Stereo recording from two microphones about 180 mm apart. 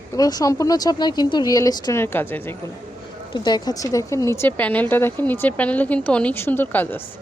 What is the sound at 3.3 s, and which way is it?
A woman's voice, 25° left (ahead or behind).